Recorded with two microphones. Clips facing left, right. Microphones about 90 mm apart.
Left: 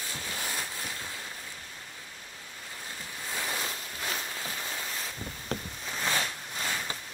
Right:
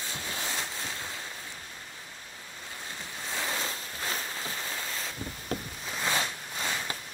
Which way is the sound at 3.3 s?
25° right (ahead or behind).